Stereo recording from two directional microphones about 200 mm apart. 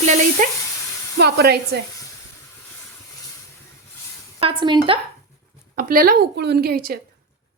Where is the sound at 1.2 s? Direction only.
55° right (ahead or behind).